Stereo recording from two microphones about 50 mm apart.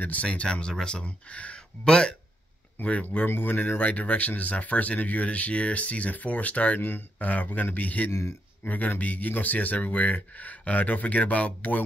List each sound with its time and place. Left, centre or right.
0.0 s speech: left
0.5 s speech: centre
1.0 s speech: left
2.8 s speech: left
3.3 s speech: left
6.8 s speech: left
7.2 s speech: left
8.1 s speech: left
8.6 s speech: left